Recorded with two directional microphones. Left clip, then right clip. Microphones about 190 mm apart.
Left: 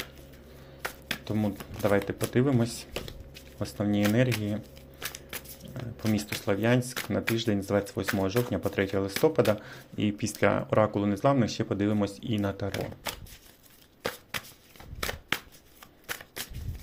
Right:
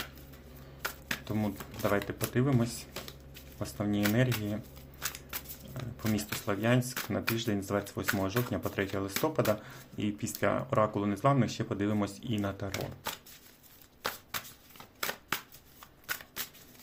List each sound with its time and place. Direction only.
1.2 s speech: 15° left (ahead or behind)
4.9 s a sound: 10° left (ahead or behind)
5.7 s speech: 20° left (ahead or behind)